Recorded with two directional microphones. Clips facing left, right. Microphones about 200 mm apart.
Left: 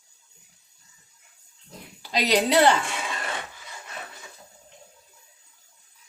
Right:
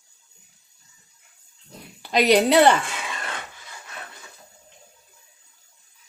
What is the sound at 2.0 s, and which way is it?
Speech, 55° right (ahead or behind).